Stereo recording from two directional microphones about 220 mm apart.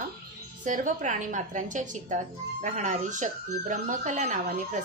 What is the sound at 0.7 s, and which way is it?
Speech, 35° right (ahead or behind).